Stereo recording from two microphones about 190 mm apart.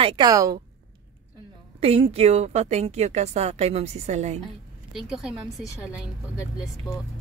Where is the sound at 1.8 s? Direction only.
30° right (ahead or behind).